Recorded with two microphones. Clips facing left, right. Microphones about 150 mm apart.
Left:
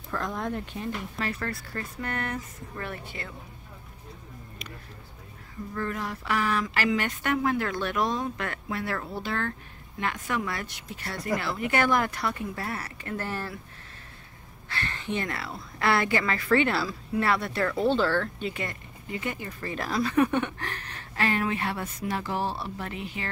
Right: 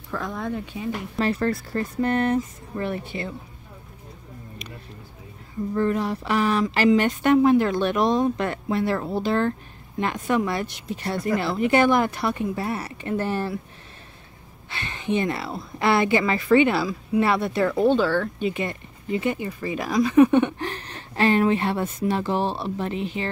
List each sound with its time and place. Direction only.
0.1 s speech: centre (ahead or behind)
1.1 s a woman's voice: 30° right (ahead or behind)
5.8 s a woman's voice: 25° right (ahead or behind)
14.7 s a woman's voice: 20° right (ahead or behind)